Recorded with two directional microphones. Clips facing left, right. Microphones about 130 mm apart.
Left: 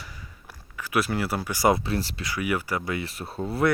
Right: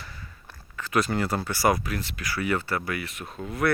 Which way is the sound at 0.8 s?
10° left (ahead or behind).